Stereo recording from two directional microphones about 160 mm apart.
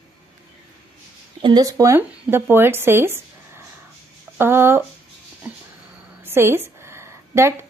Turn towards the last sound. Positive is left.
turn(degrees=-15)  # may be behind; listen again after turning